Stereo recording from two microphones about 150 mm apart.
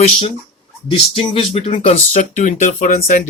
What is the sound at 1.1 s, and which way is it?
Speech, 40° left (ahead or behind).